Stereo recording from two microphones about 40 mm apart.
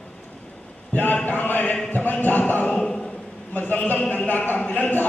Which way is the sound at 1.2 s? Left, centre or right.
Left.